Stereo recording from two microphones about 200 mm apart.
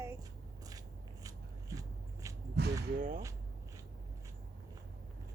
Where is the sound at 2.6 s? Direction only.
55° right (ahead or behind).